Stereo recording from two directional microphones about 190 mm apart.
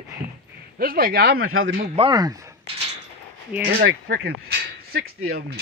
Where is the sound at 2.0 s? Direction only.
20° right (ahead or behind).